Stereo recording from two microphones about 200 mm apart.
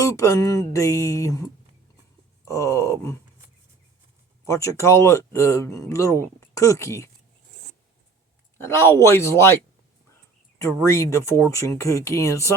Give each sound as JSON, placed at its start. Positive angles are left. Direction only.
{"t": 0.0, "sound": "speech", "side_deg": 15}
{"t": 2.5, "sound": "speech", "side_deg": 15}
{"t": 4.4, "sound": "speech", "side_deg": 15}
{"t": 8.5, "sound": "speech", "side_deg": 10}
{"t": 10.8, "sound": "speech", "side_deg": 15}